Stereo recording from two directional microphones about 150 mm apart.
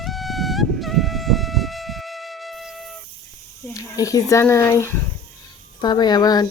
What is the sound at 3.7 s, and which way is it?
Speech, 25° left (ahead or behind).